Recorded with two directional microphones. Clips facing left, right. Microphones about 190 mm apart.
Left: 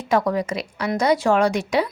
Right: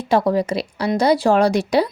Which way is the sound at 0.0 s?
30° right (ahead or behind).